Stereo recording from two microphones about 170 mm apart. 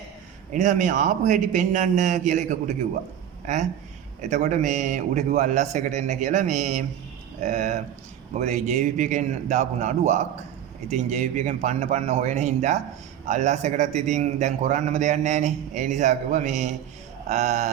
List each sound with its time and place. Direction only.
0.5 s a man's voice: 45° right (ahead or behind)